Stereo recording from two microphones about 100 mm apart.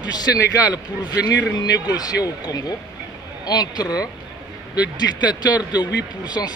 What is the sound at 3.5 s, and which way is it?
Speech, 40° left (ahead or behind).